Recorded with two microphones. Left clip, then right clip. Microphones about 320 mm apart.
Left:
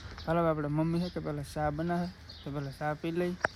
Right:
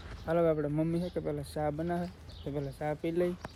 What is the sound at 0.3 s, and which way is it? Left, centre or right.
Speech, centre.